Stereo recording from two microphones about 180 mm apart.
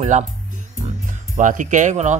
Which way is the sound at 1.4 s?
45° right (ahead or behind).